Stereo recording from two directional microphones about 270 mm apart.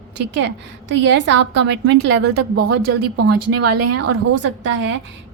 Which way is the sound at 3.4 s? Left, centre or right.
Right.